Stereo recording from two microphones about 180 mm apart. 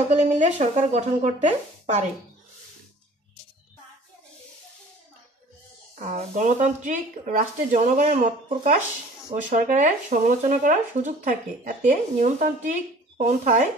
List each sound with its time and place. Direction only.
0.1 s speech: 40° right (ahead or behind)
5.9 s speech: 40° right (ahead or behind)